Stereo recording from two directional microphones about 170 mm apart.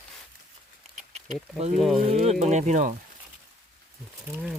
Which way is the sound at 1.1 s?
40° right (ahead or behind).